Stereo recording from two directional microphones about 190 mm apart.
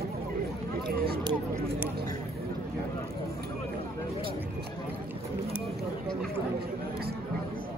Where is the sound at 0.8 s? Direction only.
55° right (ahead or behind).